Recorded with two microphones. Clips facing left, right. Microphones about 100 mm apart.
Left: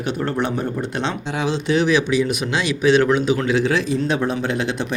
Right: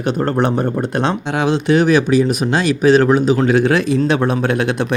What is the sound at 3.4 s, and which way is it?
A man's voice, 55° right (ahead or behind).